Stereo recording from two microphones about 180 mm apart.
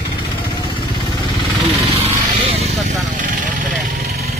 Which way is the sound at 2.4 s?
35° right (ahead or behind).